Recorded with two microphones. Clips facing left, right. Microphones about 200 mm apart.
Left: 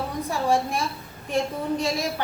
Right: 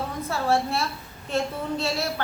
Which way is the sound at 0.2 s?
15° left (ahead or behind).